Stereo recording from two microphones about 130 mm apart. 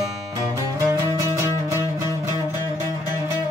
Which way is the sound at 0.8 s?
20° right (ahead or behind).